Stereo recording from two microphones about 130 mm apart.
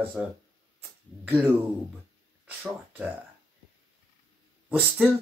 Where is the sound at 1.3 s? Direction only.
15° right (ahead or behind).